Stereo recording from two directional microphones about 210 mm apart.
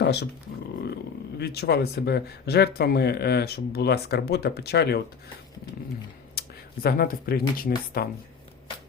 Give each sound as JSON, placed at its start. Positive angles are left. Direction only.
{"t": 0.0, "sound": "speech", "side_deg": 50}
{"t": 1.4, "sound": "speech", "side_deg": 50}
{"t": 6.8, "sound": "speech", "side_deg": 45}